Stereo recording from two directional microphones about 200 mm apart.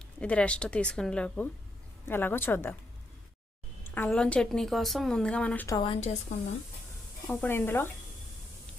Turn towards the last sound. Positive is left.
turn(degrees=10)  # may be behind; listen again after turning